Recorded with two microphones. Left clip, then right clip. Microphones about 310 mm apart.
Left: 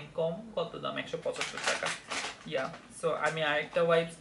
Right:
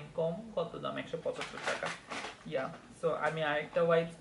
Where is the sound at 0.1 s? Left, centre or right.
Right.